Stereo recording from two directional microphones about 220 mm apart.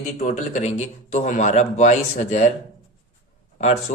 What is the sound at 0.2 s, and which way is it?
A man's voice, 35° left (ahead or behind).